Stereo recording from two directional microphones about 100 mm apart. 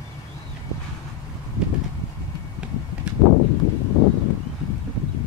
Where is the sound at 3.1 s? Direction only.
10° right (ahead or behind).